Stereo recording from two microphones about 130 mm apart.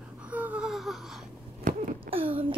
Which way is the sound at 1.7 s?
80° right.